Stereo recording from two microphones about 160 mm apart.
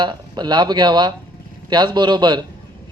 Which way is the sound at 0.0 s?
25° right (ahead or behind).